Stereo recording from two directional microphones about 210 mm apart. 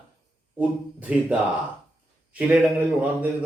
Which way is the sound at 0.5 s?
5° right (ahead or behind).